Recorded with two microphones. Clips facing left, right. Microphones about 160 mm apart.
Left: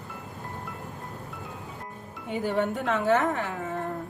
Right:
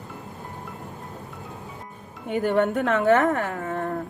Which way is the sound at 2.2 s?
65° right (ahead or behind).